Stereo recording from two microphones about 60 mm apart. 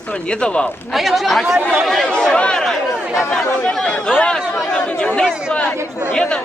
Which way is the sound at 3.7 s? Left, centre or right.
Centre.